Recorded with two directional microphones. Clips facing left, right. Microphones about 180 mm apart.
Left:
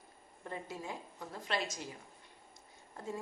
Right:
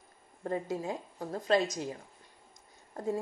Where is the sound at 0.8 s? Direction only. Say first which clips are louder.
Right 7 dB; 40° right (ahead or behind).